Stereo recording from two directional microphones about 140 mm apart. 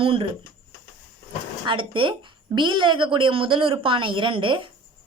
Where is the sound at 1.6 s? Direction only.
35° right (ahead or behind).